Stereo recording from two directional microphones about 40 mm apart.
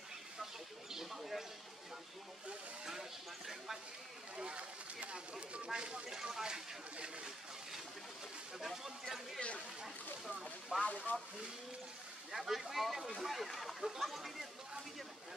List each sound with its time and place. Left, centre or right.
0.9 s speech: centre
2.8 s speech: centre
4.4 s speech: right
8.5 s speech: centre
10.8 s speech: left
12.3 s speech: centre